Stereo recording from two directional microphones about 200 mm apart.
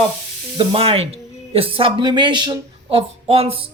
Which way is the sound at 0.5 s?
25° right (ahead or behind).